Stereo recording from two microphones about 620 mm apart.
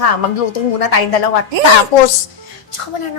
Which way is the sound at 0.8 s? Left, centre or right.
Left.